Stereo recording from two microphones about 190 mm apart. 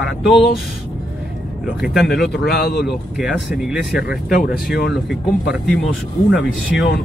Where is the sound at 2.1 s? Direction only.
55° left (ahead or behind).